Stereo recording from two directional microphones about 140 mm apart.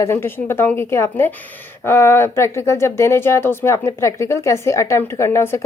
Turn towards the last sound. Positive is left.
turn(degrees=20)  # may be behind; listen again after turning